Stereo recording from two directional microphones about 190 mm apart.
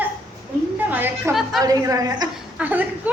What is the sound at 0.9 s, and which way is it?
Speech, 10° right (ahead or behind).